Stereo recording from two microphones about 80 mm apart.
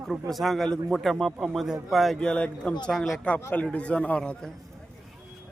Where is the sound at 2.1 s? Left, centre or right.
Centre.